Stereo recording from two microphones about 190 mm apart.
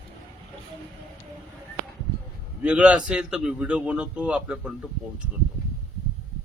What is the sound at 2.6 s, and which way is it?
A man's voice, 5° right (ahead or behind).